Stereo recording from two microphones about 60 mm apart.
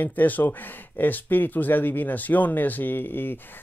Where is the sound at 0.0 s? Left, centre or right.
Left.